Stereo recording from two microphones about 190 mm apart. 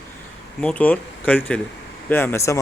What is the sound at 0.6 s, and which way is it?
Speech, 5° left (ahead or behind).